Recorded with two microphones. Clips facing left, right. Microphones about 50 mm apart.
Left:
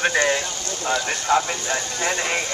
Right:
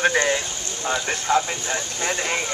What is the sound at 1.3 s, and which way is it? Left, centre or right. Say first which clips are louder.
Speech: left 1 dB; centre.